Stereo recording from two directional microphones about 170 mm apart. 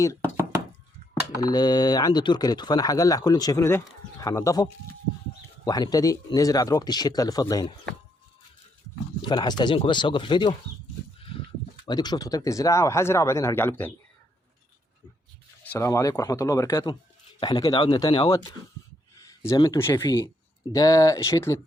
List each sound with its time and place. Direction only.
1.4 s speech: 25° left (ahead or behind)
9.2 s speech: 25° left (ahead or behind)
11.9 s speech: 25° left (ahead or behind)
15.6 s speech: 15° left (ahead or behind)